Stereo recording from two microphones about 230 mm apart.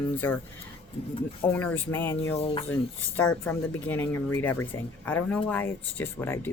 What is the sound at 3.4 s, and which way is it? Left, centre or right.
Speech, centre.